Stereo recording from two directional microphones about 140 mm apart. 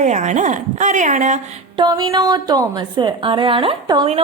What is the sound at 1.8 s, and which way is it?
A woman's voice, 30° right (ahead or behind).